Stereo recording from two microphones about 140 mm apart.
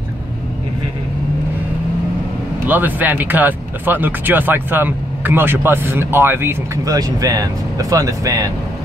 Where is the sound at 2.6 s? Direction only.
10° right (ahead or behind).